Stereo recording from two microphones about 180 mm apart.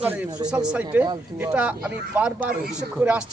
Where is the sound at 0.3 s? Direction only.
20° right (ahead or behind).